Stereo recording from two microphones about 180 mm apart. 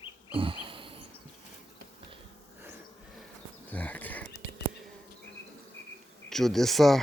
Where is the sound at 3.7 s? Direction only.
10° left (ahead or behind).